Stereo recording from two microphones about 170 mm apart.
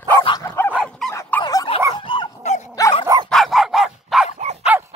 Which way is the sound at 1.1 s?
15° left (ahead or behind).